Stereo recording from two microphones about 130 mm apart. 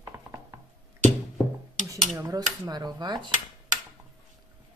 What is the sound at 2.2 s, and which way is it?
Speech, 30° right (ahead or behind).